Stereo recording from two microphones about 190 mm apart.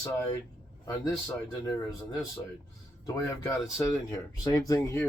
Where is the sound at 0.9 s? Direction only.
20° left (ahead or behind).